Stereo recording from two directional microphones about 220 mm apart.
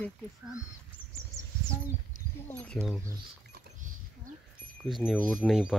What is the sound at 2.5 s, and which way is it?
Speech, 5° left (ahead or behind).